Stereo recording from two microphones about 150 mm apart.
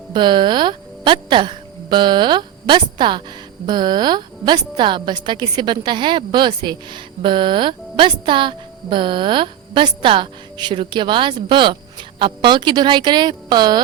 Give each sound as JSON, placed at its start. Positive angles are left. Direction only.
{"t": 0.1, "sound": "a woman's voice", "side_deg": -30}